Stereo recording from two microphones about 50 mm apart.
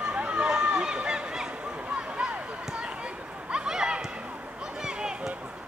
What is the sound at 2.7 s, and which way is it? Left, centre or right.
Run, centre.